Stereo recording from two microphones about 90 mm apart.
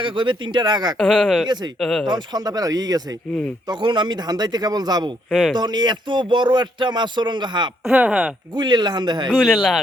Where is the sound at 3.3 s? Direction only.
10° left (ahead or behind).